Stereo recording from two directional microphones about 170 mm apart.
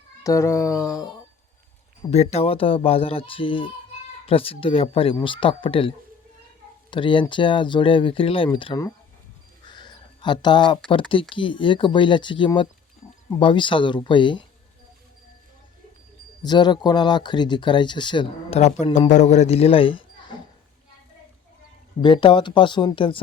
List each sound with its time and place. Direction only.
0.2 s speech: 20° left (ahead or behind)
2.0 s speech: 40° left (ahead or behind)
6.9 s speech: 30° left (ahead or behind)
9.6 s a sound: 25° left (ahead or behind)
11.1 s speech: 30° left (ahead or behind)
16.4 s speech: 25° left (ahead or behind)
18.9 s speech: 45° left (ahead or behind)
22.0 s speech: 30° left (ahead or behind)